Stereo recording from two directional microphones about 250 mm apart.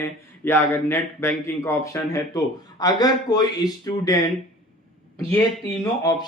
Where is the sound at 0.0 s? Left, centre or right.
Centre.